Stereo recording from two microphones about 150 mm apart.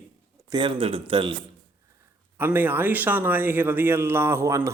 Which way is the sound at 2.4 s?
15° right (ahead or behind).